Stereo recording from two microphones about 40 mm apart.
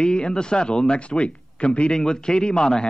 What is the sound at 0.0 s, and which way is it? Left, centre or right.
Speech, left.